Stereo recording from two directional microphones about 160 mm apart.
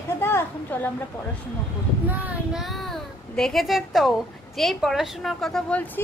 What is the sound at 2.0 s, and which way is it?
A child's voice, 10° right (ahead or behind).